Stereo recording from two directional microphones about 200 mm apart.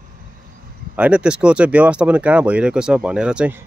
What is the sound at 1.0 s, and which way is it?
Speech, 5° right (ahead or behind).